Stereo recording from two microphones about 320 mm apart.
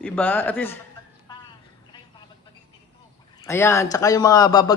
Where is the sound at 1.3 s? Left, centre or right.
Centre.